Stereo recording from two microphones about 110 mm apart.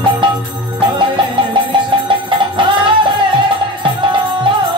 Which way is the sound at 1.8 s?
45° right (ahead or behind).